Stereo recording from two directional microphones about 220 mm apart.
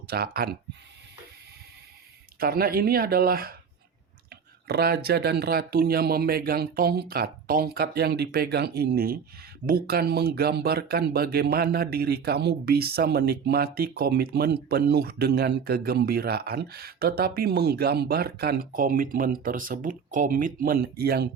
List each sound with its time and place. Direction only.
0.1 s speech: 45° right (ahead or behind)
2.4 s speech: 45° right (ahead or behind)